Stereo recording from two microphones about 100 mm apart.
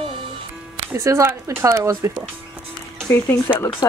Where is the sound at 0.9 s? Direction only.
30° right (ahead or behind).